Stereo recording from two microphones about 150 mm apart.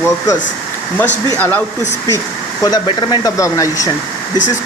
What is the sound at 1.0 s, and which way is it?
Speech, 15° left (ahead or behind).